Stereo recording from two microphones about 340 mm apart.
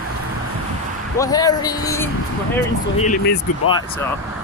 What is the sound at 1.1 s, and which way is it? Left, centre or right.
Speech, centre.